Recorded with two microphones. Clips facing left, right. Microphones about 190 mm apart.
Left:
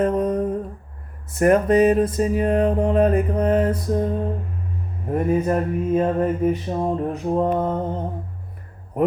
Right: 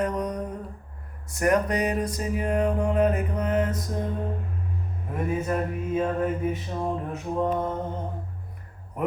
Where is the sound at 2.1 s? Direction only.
30° left (ahead or behind).